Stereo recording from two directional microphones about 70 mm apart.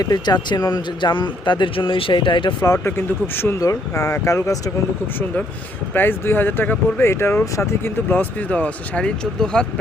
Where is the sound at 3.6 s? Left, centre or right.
Left.